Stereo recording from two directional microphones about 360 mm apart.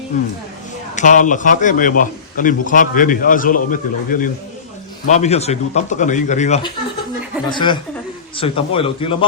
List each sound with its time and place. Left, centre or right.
0.9 s a man's voice: left